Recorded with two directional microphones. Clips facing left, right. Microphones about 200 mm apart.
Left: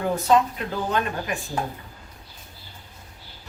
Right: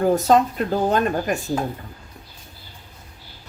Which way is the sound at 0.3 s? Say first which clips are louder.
Right 3 dB; 40° right (ahead or behind).